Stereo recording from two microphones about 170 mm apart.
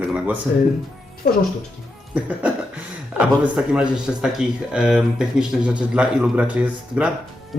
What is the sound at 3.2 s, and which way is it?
Speech, 5° right (ahead or behind).